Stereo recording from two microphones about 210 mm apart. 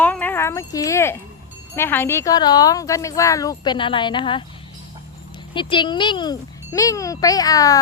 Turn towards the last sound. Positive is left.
turn(degrees=15)  # may be behind; listen again after turning